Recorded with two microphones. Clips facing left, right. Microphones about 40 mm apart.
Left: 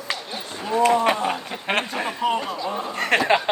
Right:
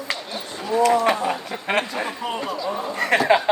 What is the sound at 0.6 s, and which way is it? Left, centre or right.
Speech, left.